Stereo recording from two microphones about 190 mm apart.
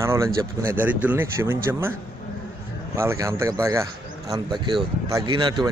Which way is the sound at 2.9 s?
15° right (ahead or behind).